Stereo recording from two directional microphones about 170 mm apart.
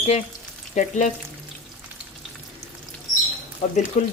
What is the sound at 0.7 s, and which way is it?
Frying, 45° left (ahead or behind).